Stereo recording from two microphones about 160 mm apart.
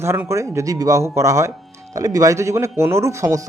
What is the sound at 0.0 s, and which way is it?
Speech, 15° right (ahead or behind).